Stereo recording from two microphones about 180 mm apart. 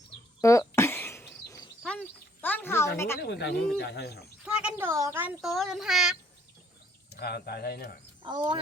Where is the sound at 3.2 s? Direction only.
70° left (ahead or behind).